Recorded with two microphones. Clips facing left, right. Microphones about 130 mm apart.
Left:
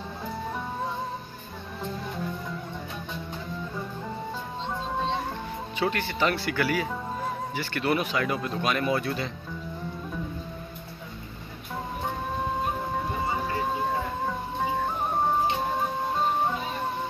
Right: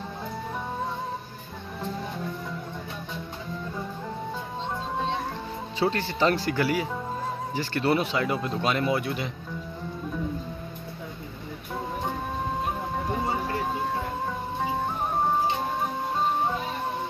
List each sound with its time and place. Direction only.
5.8 s speech: 35° right (ahead or behind)